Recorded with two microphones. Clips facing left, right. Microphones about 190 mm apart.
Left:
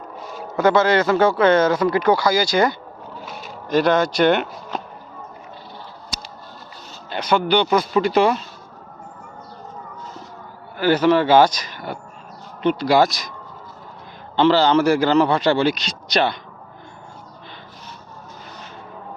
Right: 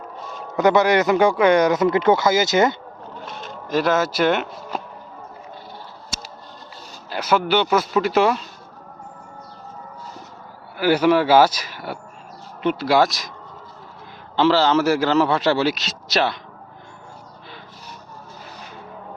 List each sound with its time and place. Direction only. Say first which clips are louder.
0.5 s speech: even; 20° right (ahead or behind)
3.2 s speech: left 1 dB; 5° left (ahead or behind)
7.1 s a man's voice: left 1 dB; 5° right (ahead or behind)
10.8 s a man's voice: even; 10° right (ahead or behind)
14.3 s a man's voice: left 1 dB; centre (ahead or behind)